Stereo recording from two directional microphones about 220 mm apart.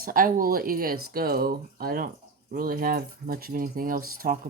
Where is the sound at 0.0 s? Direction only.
40° right (ahead or behind).